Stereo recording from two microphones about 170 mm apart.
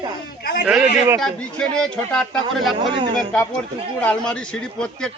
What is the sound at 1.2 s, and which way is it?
A man's voice, 5° left (ahead or behind).